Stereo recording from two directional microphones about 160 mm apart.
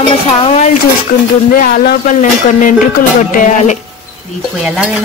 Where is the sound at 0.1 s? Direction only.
40° left (ahead or behind).